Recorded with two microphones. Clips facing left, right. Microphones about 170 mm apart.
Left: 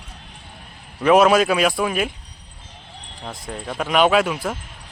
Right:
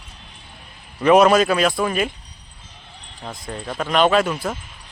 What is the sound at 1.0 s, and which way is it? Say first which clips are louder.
Speech: right 1 dB; centre (ahead or behind).